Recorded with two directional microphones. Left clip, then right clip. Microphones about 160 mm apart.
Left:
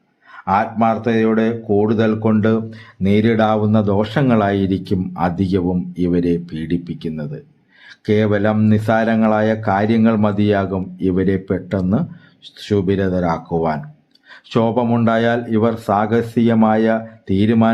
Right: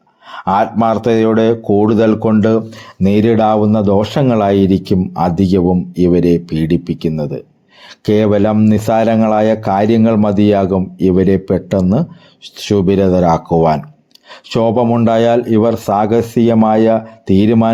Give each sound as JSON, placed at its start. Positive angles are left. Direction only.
{"t": 0.3, "sound": "speech", "side_deg": -50}